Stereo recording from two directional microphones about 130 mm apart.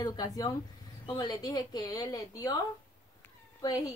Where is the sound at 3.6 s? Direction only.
25° left (ahead or behind).